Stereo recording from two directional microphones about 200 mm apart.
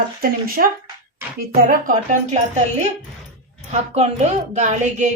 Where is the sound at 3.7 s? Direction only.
35° right (ahead or behind).